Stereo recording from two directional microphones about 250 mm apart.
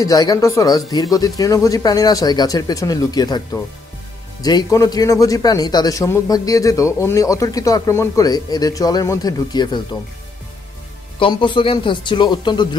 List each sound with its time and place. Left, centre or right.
0.0 s speech: centre
11.1 s speech: centre